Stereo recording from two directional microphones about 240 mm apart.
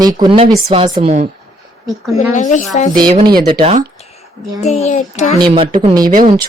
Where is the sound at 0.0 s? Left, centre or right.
Centre.